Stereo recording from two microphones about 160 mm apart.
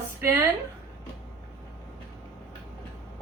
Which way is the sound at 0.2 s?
15° right (ahead or behind).